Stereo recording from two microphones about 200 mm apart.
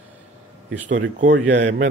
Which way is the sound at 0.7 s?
65° right (ahead or behind).